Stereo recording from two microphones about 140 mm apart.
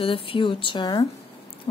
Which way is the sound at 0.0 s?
40° left (ahead or behind).